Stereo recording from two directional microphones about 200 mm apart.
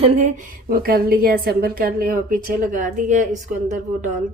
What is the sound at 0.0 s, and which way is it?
Speech, 30° right (ahead or behind).